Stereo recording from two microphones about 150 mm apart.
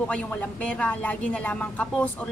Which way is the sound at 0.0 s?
10° left (ahead or behind).